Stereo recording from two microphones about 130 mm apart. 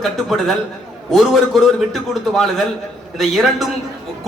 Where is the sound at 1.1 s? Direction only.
Centre (ahead or behind).